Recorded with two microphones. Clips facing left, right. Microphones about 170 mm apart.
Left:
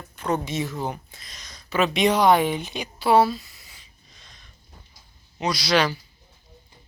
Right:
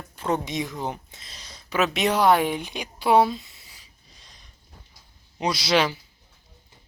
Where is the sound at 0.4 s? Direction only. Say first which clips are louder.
Left 1 dB; 15° right (ahead or behind).